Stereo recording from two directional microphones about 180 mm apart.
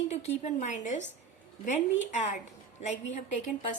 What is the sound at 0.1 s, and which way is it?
A woman's voice, 40° left (ahead or behind).